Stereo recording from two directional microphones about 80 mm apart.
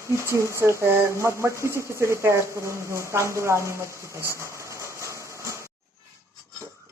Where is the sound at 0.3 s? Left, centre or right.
Right.